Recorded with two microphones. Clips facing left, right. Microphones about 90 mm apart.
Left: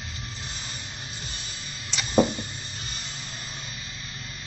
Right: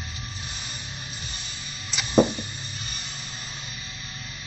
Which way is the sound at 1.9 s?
5° right (ahead or behind).